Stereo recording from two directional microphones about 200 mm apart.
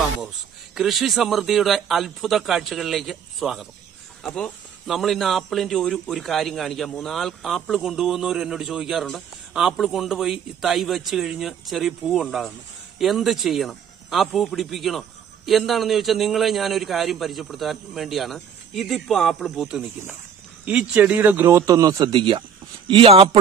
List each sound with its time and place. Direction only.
0.7 s a man's voice: centre (ahead or behind); by 23.3 s 30° right (ahead or behind)